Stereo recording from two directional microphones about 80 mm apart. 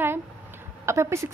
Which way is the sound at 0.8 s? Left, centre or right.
Right.